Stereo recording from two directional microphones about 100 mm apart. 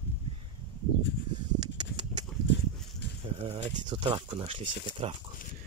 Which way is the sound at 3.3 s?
75° right (ahead or behind).